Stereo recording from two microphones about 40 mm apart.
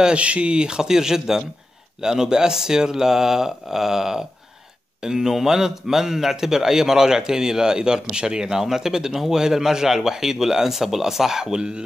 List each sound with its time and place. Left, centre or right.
0.0 s speech: right; by 11.6 s centre